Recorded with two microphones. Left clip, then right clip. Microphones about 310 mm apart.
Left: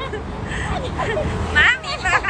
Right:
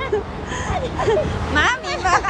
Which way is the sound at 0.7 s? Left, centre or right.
Right.